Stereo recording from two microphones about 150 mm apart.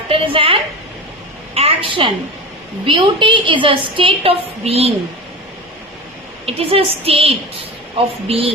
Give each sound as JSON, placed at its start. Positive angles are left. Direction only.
{"t": 0.1, "sound": "a woman's voice", "side_deg": -35}
{"t": 6.4, "sound": "a woman's voice", "side_deg": -40}